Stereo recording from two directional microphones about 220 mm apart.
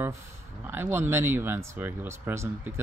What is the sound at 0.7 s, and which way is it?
Speech, 10° right (ahead or behind).